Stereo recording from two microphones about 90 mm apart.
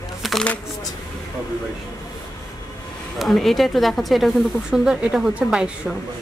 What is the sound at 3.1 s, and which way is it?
Speech, centre (ahead or behind).